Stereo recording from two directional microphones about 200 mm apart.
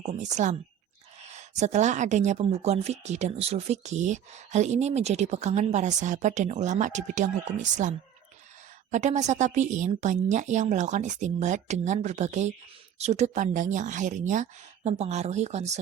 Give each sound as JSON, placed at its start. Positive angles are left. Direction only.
{"t": 0.0, "sound": "a woman's voice", "side_deg": -35}